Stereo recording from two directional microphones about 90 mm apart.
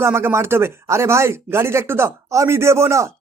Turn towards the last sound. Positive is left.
turn(degrees=-35)  # may be behind; listen again after turning